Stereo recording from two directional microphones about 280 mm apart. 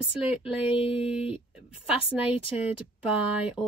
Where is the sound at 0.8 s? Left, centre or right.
Centre.